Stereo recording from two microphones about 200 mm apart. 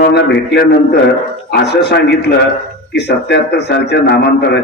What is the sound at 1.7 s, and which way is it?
A man's voice, 55° left (ahead or behind).